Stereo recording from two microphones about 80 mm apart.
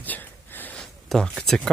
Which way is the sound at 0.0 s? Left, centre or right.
Left.